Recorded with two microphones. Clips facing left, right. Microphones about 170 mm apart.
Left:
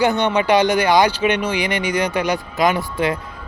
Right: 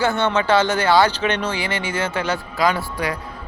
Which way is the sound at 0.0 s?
15° left (ahead or behind).